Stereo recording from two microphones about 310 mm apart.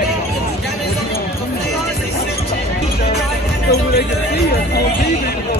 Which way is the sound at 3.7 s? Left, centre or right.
Left.